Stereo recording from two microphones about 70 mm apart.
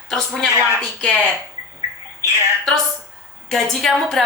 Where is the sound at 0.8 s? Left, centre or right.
Centre.